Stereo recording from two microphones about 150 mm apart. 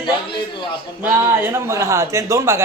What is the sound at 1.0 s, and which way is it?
Speech, 15° right (ahead or behind).